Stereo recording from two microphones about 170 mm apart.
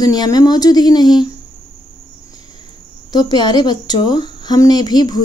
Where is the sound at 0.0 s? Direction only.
25° left (ahead or behind).